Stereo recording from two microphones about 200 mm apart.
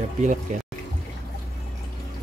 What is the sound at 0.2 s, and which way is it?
Speech, 40° right (ahead or behind).